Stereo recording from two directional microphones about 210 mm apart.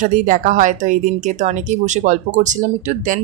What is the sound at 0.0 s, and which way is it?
Speech, 40° right (ahead or behind).